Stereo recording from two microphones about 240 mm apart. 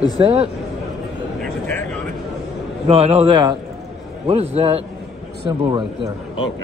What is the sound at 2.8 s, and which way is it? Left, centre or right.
A man's voice, right.